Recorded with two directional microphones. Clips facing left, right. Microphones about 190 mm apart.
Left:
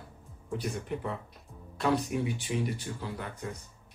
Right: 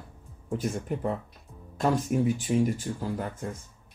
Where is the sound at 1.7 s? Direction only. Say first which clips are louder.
Right 2 dB; 45° right (ahead or behind).